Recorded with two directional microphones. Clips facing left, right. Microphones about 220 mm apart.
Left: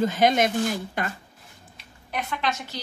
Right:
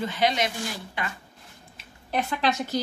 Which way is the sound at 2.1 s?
35° right (ahead or behind).